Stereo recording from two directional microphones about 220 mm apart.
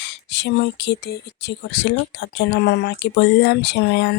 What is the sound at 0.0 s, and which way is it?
Speech, 50° left (ahead or behind).